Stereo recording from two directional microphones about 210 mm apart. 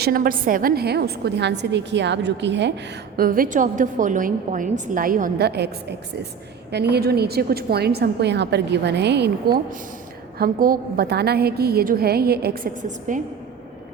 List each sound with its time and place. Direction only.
0.0 s a woman's voice: 45° right (ahead or behind)
3.2 s a woman's voice: 40° right (ahead or behind)